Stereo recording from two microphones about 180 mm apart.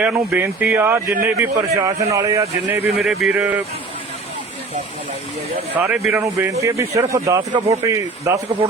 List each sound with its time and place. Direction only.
0.3 s a man's voice: 10° right (ahead or behind)
2.8 s speech: centre (ahead or behind)
5.7 s a man's voice: 10° right (ahead or behind)
6.2 s a man's voice: 15° right (ahead or behind)